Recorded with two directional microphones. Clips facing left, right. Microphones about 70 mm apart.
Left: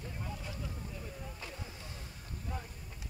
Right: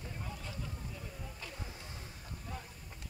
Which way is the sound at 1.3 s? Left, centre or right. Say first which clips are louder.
Left 1 dB; centre.